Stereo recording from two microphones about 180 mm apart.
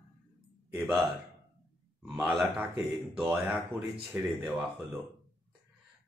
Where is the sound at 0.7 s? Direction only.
Centre (ahead or behind).